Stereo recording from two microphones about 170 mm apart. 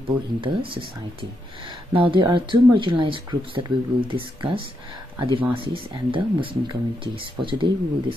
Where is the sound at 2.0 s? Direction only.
30° right (ahead or behind).